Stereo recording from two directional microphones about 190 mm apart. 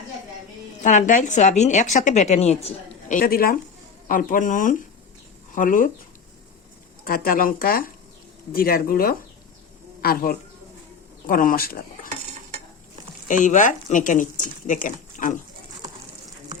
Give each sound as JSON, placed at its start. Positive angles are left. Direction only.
{"t": 0.8, "sound": "a woman's voice", "side_deg": 40}
{"t": 7.0, "sound": "speech", "side_deg": 50}
{"t": 13.2, "sound": "speech", "side_deg": 45}